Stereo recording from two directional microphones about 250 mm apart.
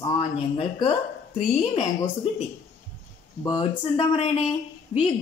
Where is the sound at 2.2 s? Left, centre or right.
Left.